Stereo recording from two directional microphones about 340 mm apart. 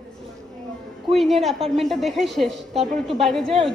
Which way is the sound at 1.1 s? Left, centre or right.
Centre.